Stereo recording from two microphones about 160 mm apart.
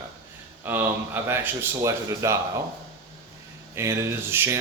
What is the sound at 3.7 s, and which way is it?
Speech, 15° right (ahead or behind).